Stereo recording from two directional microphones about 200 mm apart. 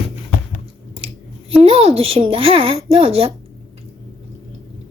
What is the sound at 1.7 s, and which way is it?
Speech, 30° right (ahead or behind).